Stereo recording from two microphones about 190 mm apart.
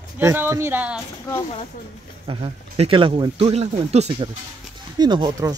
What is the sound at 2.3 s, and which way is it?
Speech, 30° right (ahead or behind).